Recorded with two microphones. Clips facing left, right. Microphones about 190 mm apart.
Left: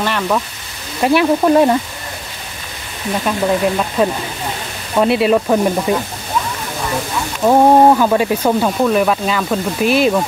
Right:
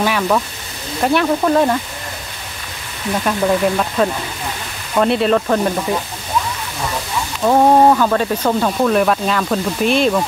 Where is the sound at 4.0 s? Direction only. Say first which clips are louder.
Left 1 dB; 10° left (ahead or behind).